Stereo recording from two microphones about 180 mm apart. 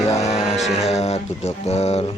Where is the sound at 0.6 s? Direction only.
35° left (ahead or behind).